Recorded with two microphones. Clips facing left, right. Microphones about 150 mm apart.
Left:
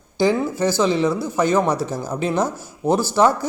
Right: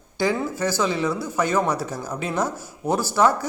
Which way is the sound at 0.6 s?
25° left (ahead or behind).